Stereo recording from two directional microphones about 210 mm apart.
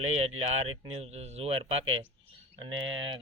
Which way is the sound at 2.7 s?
65° right (ahead or behind).